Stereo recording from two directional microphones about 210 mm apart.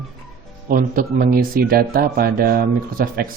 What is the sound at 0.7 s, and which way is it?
Speech, 40° right (ahead or behind).